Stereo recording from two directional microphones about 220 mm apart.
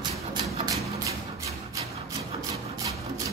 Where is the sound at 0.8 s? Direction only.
15° right (ahead or behind).